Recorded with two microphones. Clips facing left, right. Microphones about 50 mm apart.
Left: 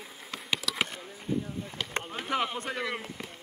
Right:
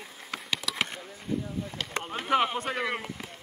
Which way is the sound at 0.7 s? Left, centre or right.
Centre.